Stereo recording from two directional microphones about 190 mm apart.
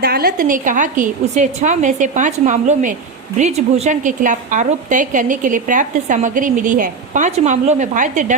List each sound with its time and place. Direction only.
0.0 s a woman's voice: 55° right (ahead or behind)